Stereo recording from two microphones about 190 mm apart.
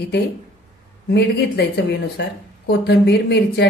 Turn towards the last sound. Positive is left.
turn(degrees=60)  # may be behind; listen again after turning